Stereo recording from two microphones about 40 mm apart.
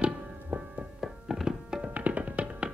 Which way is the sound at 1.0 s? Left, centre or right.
Centre.